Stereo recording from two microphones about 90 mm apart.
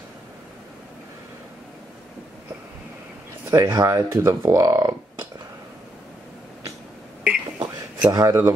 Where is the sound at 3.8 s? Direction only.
35° right (ahead or behind).